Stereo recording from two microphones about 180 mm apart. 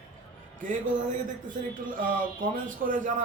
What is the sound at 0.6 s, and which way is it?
Speech, 45° right (ahead or behind).